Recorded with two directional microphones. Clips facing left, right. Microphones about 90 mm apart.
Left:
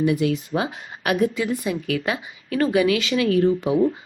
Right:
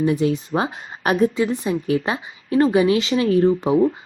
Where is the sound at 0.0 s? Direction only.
30° right (ahead or behind).